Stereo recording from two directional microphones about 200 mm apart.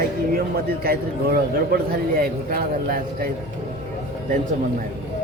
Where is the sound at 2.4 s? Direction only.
45° right (ahead or behind).